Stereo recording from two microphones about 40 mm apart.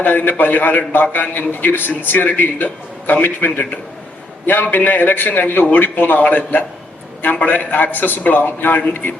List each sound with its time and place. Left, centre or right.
0.0 s a man's voice: left